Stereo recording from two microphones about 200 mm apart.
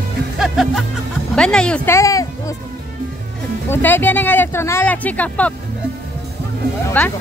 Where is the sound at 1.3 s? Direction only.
5° left (ahead or behind).